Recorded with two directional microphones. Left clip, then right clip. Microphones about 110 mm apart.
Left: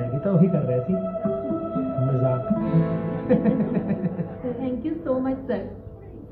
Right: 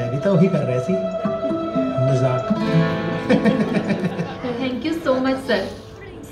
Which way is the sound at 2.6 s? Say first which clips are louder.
Right 5 dB; 10° left (ahead or behind).